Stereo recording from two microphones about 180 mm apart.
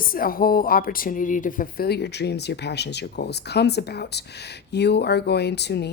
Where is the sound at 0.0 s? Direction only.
50° left (ahead or behind).